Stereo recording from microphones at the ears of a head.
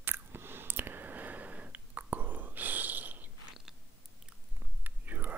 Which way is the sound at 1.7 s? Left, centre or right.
Right.